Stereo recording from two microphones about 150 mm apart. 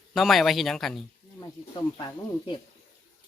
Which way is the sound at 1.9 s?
30° left (ahead or behind).